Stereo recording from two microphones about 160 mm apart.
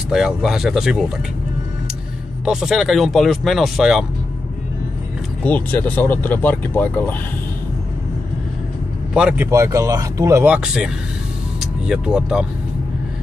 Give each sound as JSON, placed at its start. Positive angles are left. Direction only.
{"t": 0.1, "sound": "speech", "side_deg": -5}
{"t": 2.4, "sound": "speech", "side_deg": -5}
{"t": 5.4, "sound": "speech", "side_deg": 10}
{"t": 9.1, "sound": "speech", "side_deg": -5}
{"t": 9.5, "sound": "speech", "side_deg": -20}